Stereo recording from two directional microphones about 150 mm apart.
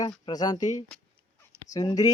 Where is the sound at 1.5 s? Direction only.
20° right (ahead or behind).